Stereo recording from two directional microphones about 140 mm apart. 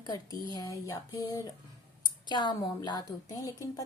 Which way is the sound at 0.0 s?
30° left (ahead or behind).